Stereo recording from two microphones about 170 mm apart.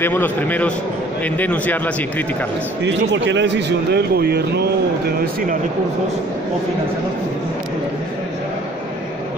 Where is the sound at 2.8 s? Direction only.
90° right; by 4.6 s 70° right (ahead or behind).